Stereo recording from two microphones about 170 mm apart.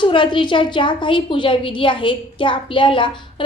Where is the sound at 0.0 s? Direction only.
30° left (ahead or behind).